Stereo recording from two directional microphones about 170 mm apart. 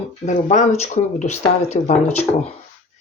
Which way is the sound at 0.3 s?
45° left (ahead or behind).